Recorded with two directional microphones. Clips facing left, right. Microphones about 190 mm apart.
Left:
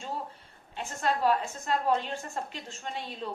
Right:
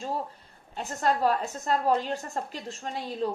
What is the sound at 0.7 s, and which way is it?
A woman's voice, 40° right (ahead or behind).